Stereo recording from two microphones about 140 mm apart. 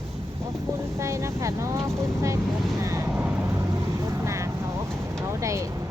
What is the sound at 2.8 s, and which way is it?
Vehicle, 20° right (ahead or behind).